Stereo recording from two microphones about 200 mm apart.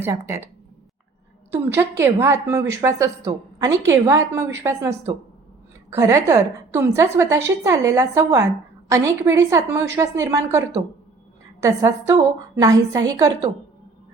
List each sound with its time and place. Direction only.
0.0 s a woman's voice: 15° right (ahead or behind)
1.5 s a woman's voice: 10° right (ahead or behind)